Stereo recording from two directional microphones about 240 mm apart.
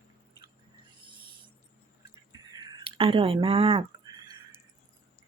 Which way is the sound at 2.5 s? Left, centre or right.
Centre.